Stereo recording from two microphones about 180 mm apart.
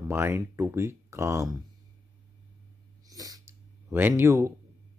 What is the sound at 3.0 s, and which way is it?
Sneeze, 20° right (ahead or behind).